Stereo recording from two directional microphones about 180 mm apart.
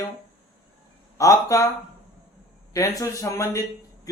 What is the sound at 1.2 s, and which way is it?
Speech, 15° left (ahead or behind).